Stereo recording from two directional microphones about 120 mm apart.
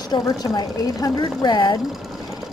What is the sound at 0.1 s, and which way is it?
Speech, 40° left (ahead or behind).